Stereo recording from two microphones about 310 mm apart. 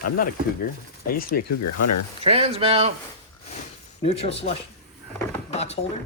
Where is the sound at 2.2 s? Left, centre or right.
Centre.